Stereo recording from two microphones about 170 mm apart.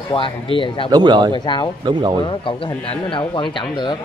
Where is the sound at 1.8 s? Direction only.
25° right (ahead or behind).